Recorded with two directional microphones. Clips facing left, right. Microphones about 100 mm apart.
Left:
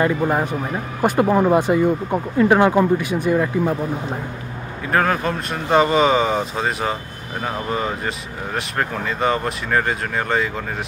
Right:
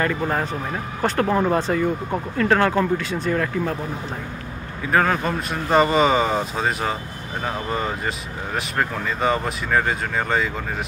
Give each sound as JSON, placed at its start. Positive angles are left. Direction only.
{"t": 0.0, "sound": "speech", "side_deg": 15}
{"t": 4.9, "sound": "speech", "side_deg": 0}